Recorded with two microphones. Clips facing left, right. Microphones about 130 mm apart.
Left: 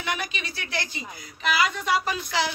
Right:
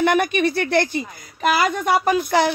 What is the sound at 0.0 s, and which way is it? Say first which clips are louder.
A woman's voice: right 14 dB; 55° right (ahead or behind).